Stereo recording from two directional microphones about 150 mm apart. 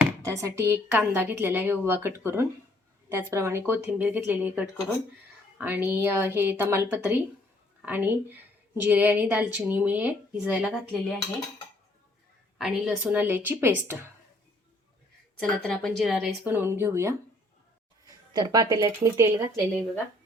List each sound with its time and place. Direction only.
0.0 s a woman's voice: 20° right (ahead or behind)
12.5 s a woman's voice: centre (ahead or behind); by 14.1 s 15° right (ahead or behind)
15.4 s speech: 5° left (ahead or behind)
16.5 s a woman's voice: 15° right (ahead or behind)
18.3 s speech: 25° right (ahead or behind)